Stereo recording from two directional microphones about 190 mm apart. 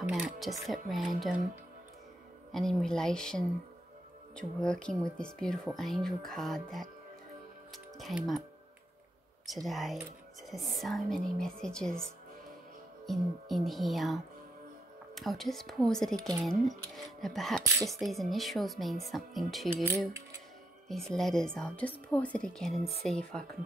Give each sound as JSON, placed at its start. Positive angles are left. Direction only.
{"t": 0.1, "sound": "speech", "side_deg": 0}
{"t": 2.5, "sound": "speech", "side_deg": 0}
{"t": 9.7, "sound": "speech", "side_deg": 0}
{"t": 13.0, "sound": "speech", "side_deg": 0}
{"t": 20.9, "sound": "speech", "side_deg": 0}